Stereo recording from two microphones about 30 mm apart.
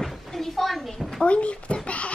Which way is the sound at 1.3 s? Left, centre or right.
Left.